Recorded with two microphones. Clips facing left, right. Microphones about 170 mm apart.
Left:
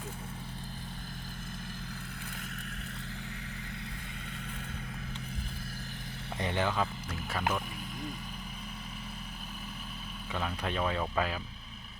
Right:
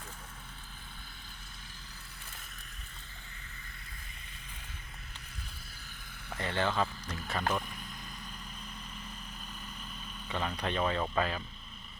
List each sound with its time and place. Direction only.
6.3 s speech: 20° left (ahead or behind)
6.7 s speech: 5° left (ahead or behind)
10.3 s speech: 5° left (ahead or behind)